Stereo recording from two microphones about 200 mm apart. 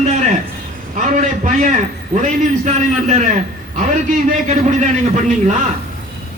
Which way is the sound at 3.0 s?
35° right (ahead or behind).